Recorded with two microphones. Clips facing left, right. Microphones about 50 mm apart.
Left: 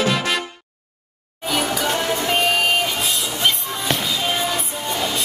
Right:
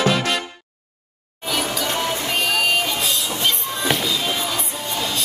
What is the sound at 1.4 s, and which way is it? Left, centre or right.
Music, centre.